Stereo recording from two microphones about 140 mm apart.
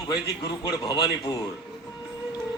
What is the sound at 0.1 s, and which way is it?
A man's voice, 30° left (ahead or behind).